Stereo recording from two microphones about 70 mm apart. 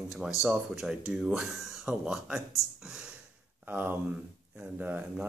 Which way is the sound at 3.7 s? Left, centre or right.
Right.